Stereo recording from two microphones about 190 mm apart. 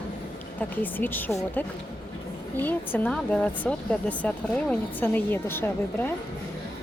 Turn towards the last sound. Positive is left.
turn(degrees=10)  # may be behind; listen again after turning